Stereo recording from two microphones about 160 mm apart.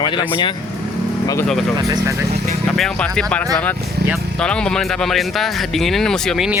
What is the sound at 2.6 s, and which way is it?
Speech, centre (ahead or behind).